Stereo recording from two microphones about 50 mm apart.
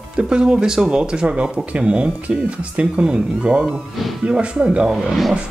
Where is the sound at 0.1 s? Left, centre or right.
Centre.